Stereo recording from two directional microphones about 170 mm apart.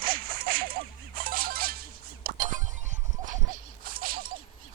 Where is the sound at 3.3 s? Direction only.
55° right (ahead or behind).